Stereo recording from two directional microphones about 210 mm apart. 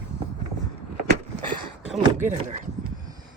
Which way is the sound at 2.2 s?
35° right (ahead or behind).